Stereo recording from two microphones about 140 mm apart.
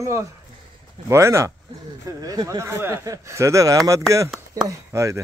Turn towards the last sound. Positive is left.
turn(degrees=-20)  # may be behind; listen again after turning